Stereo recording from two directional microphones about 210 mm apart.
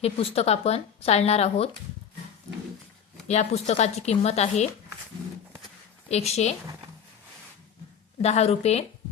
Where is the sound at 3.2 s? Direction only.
30° left (ahead or behind).